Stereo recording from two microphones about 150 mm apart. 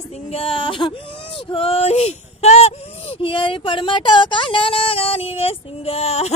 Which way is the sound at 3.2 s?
35° left (ahead or behind).